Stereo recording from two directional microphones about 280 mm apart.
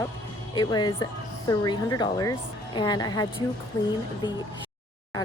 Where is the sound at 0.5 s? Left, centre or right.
Centre.